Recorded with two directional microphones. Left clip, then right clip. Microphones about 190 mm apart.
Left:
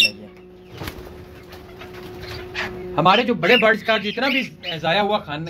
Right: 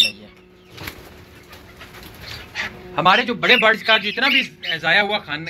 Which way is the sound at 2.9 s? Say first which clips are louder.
Even; 20° left (ahead or behind).